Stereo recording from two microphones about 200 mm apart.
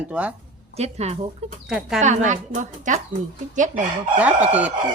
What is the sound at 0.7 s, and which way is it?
Speech, 30° right (ahead or behind).